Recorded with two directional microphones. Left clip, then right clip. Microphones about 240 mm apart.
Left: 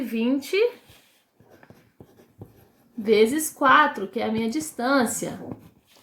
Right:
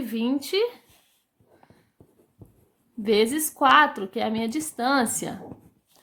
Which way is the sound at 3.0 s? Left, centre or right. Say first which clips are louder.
Left 3 dB; right.